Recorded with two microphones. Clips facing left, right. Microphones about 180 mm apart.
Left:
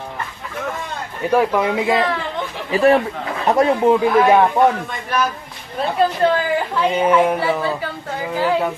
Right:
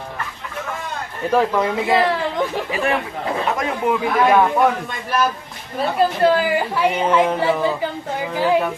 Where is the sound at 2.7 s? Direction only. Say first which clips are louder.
Left 11 dB; 35° left (ahead or behind).